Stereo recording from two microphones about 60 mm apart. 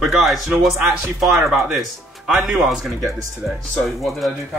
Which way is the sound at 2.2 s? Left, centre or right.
Centre.